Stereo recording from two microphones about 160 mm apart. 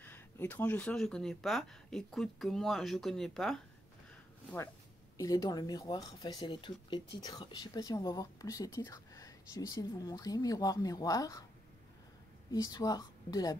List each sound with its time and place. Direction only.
0.0 s speech: 10° left (ahead or behind)
5.1 s speech: 20° left (ahead or behind)
12.4 s speech: 25° left (ahead or behind)